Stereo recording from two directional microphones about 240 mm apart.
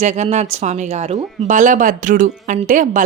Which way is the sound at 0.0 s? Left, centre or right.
Right.